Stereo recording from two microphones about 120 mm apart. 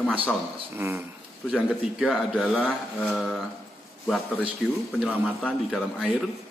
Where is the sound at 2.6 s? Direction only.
10° left (ahead or behind).